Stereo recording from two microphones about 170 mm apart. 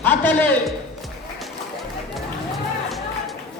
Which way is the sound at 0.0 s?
10° left (ahead or behind).